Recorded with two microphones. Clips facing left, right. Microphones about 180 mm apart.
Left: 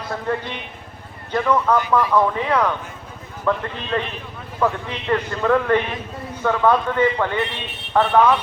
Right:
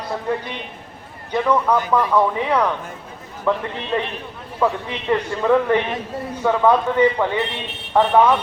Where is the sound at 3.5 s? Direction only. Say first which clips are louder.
Right 1 dB; 15° right (ahead or behind).